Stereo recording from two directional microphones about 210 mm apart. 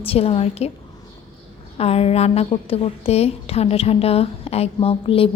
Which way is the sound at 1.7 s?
30° left (ahead or behind).